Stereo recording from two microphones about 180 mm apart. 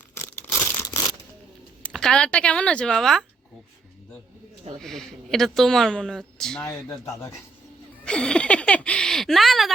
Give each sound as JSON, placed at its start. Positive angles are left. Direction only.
{"t": 0.7, "sound": "crumpling", "side_deg": 20}
{"t": 1.8, "sound": "speech", "side_deg": 5}
{"t": 4.8, "sound": "speech", "side_deg": 0}
{"t": 7.0, "sound": "speech", "side_deg": 15}
{"t": 8.0, "sound": "a sound", "side_deg": 5}